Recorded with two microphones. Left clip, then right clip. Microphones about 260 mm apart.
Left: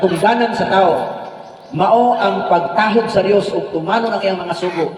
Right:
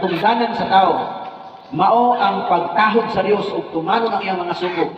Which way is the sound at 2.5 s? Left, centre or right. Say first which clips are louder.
Left 2 dB; left.